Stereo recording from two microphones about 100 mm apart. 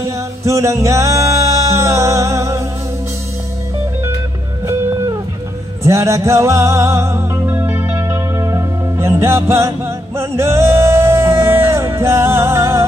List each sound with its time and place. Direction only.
0.4 s music: 30° right (ahead or behind)
4.6 s music: 30° right (ahead or behind)